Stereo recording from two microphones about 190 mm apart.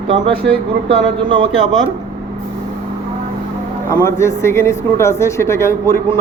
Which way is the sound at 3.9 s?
15° left (ahead or behind).